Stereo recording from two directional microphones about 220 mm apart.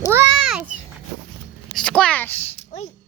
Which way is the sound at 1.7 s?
5° left (ahead or behind).